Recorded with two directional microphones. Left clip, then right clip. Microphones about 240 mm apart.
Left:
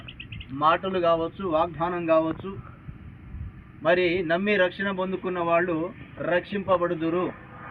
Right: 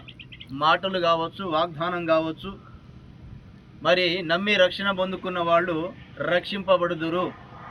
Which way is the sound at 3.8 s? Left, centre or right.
Right.